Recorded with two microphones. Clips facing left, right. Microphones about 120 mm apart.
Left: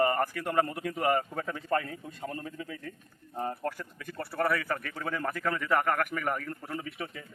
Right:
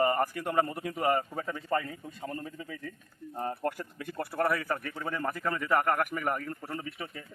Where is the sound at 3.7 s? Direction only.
25° right (ahead or behind).